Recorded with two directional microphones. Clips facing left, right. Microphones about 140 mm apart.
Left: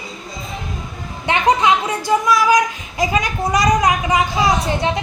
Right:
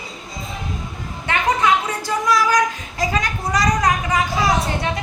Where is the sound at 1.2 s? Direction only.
15° left (ahead or behind).